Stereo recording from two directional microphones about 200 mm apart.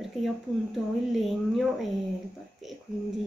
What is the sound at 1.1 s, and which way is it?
Speech, centre (ahead or behind).